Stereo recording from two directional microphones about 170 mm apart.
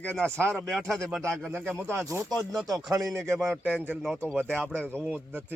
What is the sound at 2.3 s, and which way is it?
Speech, centre (ahead or behind).